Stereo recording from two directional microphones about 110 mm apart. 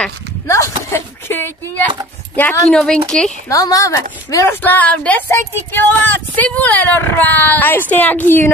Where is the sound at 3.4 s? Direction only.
30° left (ahead or behind).